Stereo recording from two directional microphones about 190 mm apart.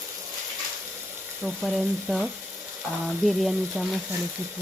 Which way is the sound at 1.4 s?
Centre (ahead or behind).